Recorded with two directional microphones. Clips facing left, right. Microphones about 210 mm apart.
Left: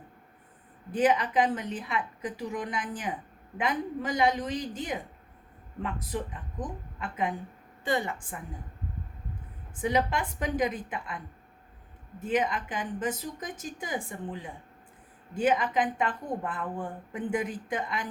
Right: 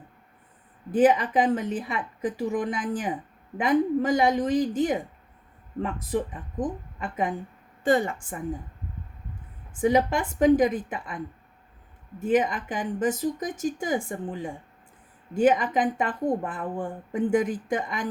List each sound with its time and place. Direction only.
0.9 s speech: 50° right (ahead or behind)
9.8 s speech: 50° right (ahead or behind)
12.2 s speech: 50° right (ahead or behind)